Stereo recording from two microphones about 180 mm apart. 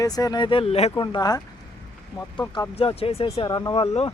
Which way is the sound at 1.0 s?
25° left (ahead or behind).